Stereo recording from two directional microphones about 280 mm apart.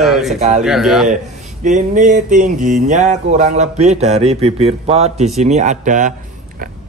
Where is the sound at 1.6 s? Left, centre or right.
Right.